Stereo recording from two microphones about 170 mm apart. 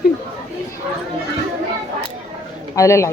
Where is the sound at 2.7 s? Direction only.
20° left (ahead or behind).